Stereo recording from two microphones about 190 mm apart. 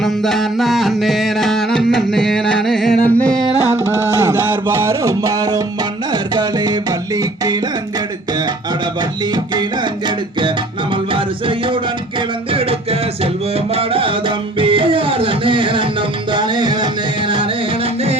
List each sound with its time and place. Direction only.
0.0 s music: centre (ahead or behind)
4.2 s music: 15° right (ahead or behind)
11.1 s music: 25° right (ahead or behind)